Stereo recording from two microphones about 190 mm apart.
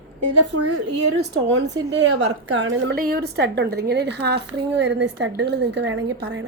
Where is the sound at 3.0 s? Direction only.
55° right (ahead or behind).